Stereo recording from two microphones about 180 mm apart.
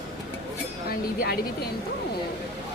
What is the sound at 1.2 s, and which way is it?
Speech, 60° left (ahead or behind).